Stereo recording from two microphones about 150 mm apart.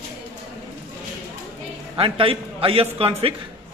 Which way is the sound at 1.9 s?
35° right (ahead or behind).